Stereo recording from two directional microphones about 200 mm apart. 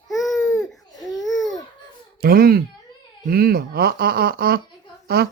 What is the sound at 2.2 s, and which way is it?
Speech, 50° right (ahead or behind).